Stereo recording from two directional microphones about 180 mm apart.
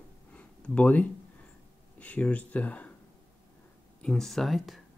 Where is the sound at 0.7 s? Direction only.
10° left (ahead or behind).